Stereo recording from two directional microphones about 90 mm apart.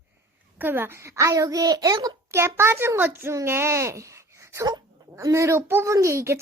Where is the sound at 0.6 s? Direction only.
25° right (ahead or behind); by 2.1 s 45° right (ahead or behind).